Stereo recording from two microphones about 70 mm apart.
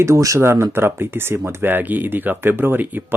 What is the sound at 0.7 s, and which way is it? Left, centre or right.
Speech, right.